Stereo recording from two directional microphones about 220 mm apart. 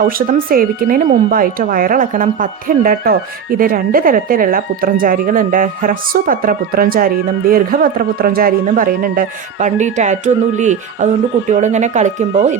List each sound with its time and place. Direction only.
0.0 s speech: 40° right (ahead or behind)